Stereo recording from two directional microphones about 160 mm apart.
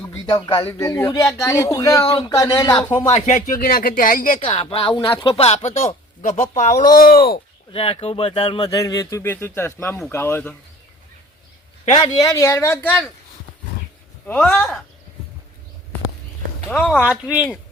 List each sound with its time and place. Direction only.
0.1 s speech: 25° left (ahead or behind)
3.1 s speech: 50° left (ahead or behind)
4.4 s speech: 35° left (ahead or behind); by 7.3 s 70° left (ahead or behind)
7.7 s speech: 35° left (ahead or behind); by 10.5 s 15° left (ahead or behind)
12.0 s speech: 25° left (ahead or behind)
14.3 s speech: 10° left (ahead or behind)
16.6 s speech: 5° left (ahead or behind)
17.2 s speech: 5° right (ahead or behind)